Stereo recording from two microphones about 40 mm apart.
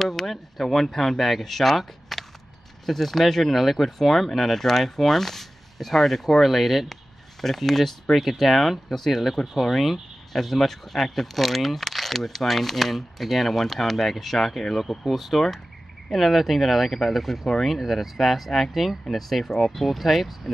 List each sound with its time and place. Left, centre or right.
0.0 s speech: centre